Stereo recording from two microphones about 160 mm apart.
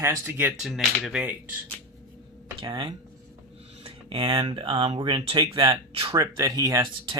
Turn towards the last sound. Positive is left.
turn(degrees=-25)  # may be behind; listen again after turning